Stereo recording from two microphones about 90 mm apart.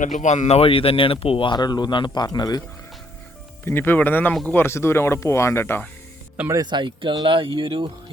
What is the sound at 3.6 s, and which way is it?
Speech, 25° left (ahead or behind).